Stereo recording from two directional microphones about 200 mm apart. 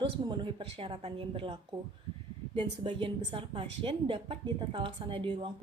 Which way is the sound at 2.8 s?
25° right (ahead or behind).